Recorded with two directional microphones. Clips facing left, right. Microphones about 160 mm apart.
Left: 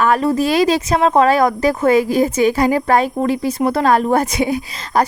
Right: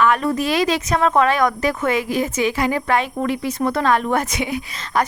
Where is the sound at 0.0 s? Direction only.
35° left (ahead or behind).